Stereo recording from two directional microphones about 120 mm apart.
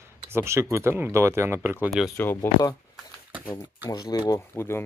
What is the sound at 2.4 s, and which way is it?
Speech, 15° left (ahead or behind).